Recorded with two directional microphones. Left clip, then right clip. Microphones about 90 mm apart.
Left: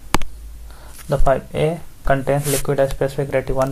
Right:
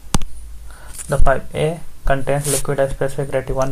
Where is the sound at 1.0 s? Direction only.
30° left (ahead or behind).